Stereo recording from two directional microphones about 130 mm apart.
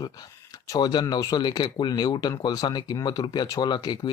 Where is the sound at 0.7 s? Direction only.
30° left (ahead or behind).